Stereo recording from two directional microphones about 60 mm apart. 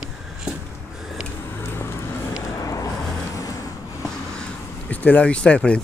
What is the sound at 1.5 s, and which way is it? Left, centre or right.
Vehicle, left.